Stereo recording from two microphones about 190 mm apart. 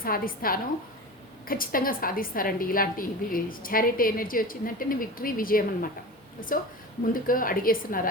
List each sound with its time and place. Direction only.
0.0 s a woman's voice: 50° left (ahead or behind)
7.1 s a woman's voice: 45° left (ahead or behind)